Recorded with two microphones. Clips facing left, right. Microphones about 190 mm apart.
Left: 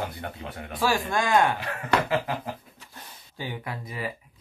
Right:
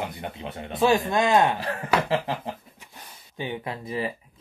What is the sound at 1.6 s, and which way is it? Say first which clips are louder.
Speech: right 1 dB; 35° right (ahead or behind).